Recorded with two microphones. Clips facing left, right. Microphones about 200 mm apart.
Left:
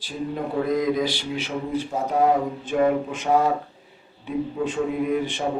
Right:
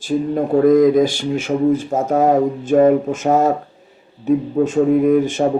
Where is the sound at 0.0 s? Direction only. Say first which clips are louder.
Right 10 dB; 50° right (ahead or behind).